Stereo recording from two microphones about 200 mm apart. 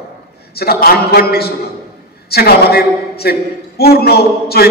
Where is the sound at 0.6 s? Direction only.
50° left (ahead or behind).